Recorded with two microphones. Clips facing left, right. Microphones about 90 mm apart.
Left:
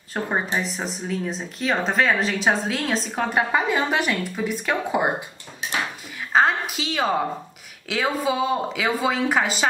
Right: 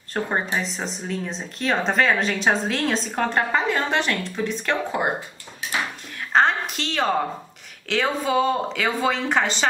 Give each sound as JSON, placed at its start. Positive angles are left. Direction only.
{"t": 0.2, "sound": "speech", "side_deg": 5}
{"t": 5.6, "sound": "dishes", "side_deg": 25}
{"t": 6.3, "sound": "a woman's voice", "side_deg": 5}